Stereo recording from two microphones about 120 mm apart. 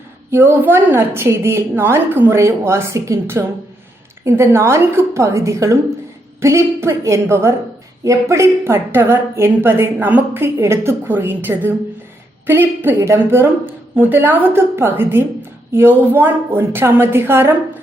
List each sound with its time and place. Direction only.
0.3 s a woman's voice: 20° right (ahead or behind)